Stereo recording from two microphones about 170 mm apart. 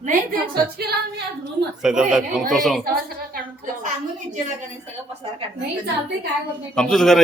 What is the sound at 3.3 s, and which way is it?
A woman's voice, 55° right (ahead or behind).